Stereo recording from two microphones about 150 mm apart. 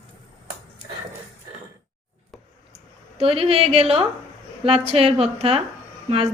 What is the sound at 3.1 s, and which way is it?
A woman's voice, 40° right (ahead or behind).